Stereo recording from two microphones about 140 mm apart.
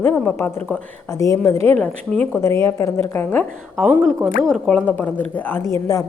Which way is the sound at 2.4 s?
20° left (ahead or behind).